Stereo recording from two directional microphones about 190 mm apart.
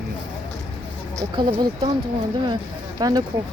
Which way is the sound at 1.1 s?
25° right (ahead or behind).